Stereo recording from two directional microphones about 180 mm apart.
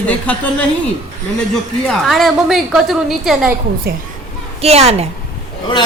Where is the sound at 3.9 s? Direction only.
60° right (ahead or behind).